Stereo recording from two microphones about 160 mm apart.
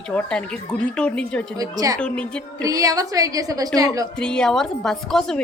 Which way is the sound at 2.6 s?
20° right (ahead or behind).